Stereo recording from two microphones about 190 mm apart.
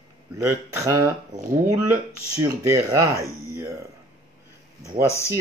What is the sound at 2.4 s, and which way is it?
Speech, 15° right (ahead or behind).